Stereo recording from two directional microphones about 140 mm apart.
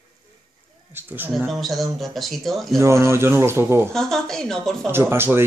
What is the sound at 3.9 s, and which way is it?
Speech, 5° left (ahead or behind).